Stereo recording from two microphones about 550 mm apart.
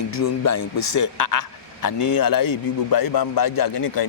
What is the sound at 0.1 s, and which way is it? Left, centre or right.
A man's voice, left.